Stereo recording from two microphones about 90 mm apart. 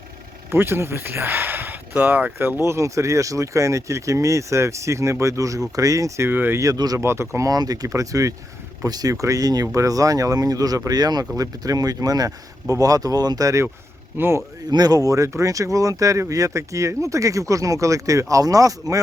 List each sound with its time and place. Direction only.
0.5 s speech: 25° right (ahead or behind)
2.6 s speech: 35° right (ahead or behind)
6.6 s speech: 45° right (ahead or behind)
7.0 s speech: 30° right (ahead or behind)
14.2 s speech: 25° right (ahead or behind)
14.7 s speech: 45° right (ahead or behind)